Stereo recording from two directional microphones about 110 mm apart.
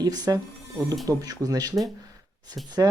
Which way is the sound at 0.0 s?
35° right (ahead or behind).